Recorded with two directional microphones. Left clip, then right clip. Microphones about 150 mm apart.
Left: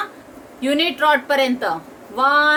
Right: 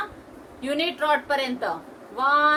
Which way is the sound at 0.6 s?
65° left (ahead or behind).